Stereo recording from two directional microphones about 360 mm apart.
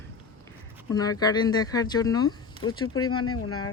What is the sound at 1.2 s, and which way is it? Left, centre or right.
Speech, centre.